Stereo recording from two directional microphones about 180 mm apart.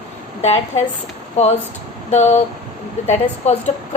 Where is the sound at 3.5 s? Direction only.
35° left (ahead or behind).